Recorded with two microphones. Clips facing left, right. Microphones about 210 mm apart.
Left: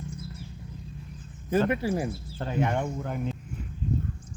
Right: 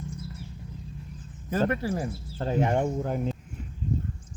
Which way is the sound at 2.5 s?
35° right (ahead or behind).